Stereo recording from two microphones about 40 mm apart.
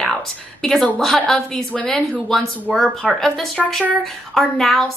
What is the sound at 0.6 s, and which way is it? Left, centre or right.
Speech, centre.